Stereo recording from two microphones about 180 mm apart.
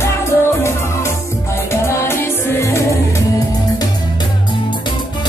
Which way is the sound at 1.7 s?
15° left (ahead or behind).